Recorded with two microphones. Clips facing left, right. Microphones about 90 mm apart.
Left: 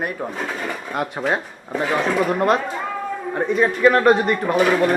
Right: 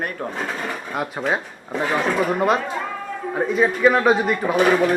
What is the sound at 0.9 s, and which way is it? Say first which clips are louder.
Speech: left 1 dB; centre (ahead or behind).